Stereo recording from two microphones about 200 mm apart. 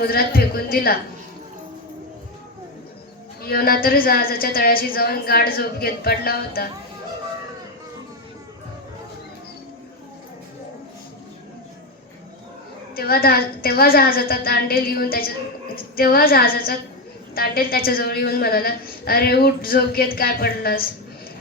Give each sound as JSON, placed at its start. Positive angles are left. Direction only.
{"t": 0.0, "sound": "a woman's voice", "side_deg": 50}
{"t": 3.4, "sound": "a woman's voice", "side_deg": 50}
{"t": 13.0, "sound": "a woman's voice", "side_deg": 50}